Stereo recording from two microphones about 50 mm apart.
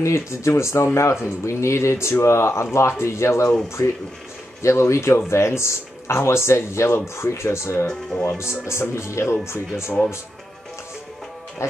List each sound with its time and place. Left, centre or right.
0.0 s speech: left
4.6 s speech: left
7.8 s speech: centre
8.4 s speech: left